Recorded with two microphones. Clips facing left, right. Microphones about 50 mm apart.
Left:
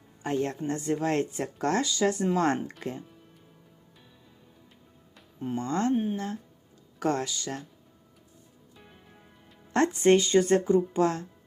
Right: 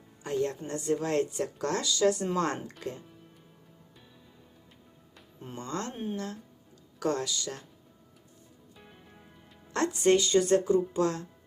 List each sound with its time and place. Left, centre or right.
0.2 s a woman's voice: left
5.5 s a woman's voice: left
5.9 s speech: centre
6.1 s speech: left
8.7 s music: centre
9.7 s a woman's voice: left